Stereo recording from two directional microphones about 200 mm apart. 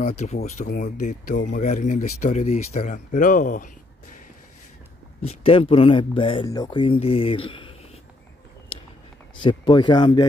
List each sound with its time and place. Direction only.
0.0 s speech: 35° left (ahead or behind)
5.2 s speech: 30° left (ahead or behind)
9.4 s speech: 25° left (ahead or behind)